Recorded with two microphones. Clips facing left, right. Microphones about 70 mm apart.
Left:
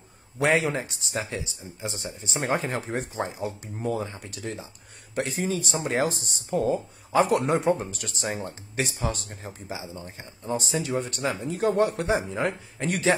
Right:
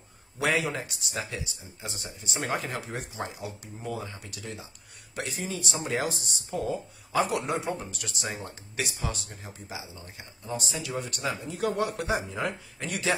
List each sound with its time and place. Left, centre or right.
0.4 s speech: left